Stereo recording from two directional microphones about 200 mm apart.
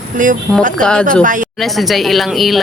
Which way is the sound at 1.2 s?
40° right (ahead or behind).